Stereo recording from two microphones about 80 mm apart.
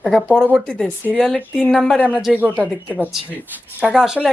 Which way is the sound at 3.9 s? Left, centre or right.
Centre.